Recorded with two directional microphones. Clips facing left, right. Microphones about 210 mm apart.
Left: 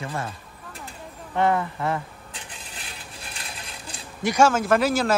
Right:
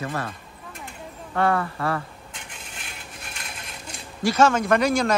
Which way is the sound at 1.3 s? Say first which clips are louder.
Even; 20° left (ahead or behind).